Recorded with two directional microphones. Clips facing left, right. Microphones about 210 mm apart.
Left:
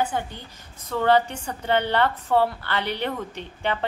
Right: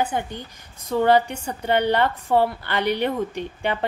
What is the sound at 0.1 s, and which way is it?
A woman's voice, 15° right (ahead or behind).